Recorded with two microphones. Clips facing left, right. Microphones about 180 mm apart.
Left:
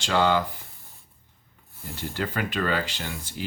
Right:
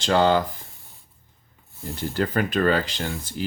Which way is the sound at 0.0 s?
45° right (ahead or behind).